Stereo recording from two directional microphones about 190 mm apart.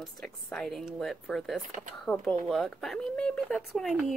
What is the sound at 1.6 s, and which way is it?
Speech, 45° right (ahead or behind).